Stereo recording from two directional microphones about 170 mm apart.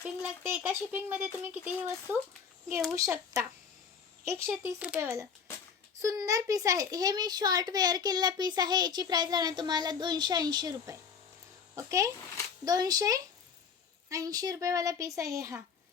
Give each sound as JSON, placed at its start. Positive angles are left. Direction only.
{"t": 0.0, "sound": "speech", "side_deg": -10}